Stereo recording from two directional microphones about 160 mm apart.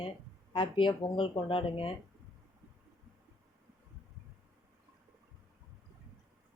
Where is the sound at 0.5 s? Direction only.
30° left (ahead or behind).